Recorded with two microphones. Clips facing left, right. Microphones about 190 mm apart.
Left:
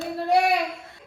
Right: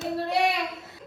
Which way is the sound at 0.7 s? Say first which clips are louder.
Even; 5° right (ahead or behind).